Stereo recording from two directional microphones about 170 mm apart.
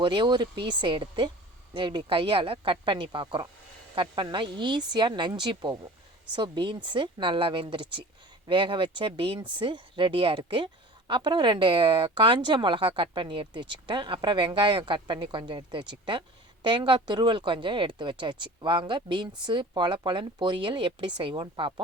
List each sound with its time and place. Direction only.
0.0 s speech: 25° right (ahead or behind)